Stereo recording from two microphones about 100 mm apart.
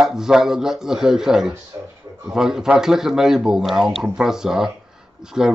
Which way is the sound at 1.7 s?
25° right (ahead or behind).